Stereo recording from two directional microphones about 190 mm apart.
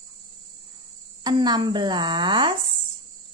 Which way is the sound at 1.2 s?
20° right (ahead or behind).